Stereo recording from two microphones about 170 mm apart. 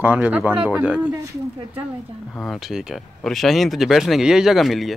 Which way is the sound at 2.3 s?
Centre (ahead or behind).